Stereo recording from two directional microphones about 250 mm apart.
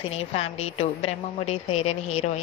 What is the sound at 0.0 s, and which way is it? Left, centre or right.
A woman's voice, left.